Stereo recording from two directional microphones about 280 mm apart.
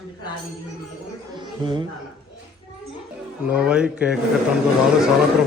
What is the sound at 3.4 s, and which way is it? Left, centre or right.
Speech, centre.